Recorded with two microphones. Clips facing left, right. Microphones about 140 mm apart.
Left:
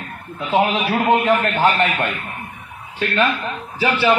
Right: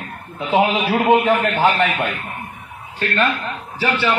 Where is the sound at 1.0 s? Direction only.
5° right (ahead or behind).